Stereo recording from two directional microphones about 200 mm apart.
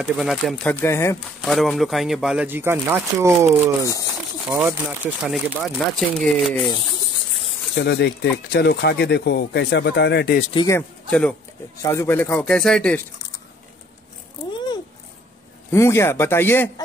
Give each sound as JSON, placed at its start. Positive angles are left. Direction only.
{"t": 0.1, "sound": "speech", "side_deg": 0}
{"t": 1.4, "sound": "speech", "side_deg": 0}
{"t": 7.7, "sound": "speech", "side_deg": 55}
{"t": 10.5, "sound": "speech", "side_deg": 20}
{"t": 11.1, "sound": "speech", "side_deg": 5}
{"t": 11.8, "sound": "speech", "side_deg": 15}
{"t": 15.7, "sound": "speech", "side_deg": 15}